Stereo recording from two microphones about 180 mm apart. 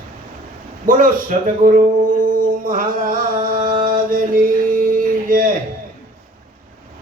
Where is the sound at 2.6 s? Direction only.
50° right (ahead or behind).